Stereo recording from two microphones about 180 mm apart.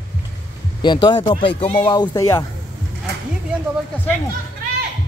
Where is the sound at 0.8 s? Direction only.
25° left (ahead or behind).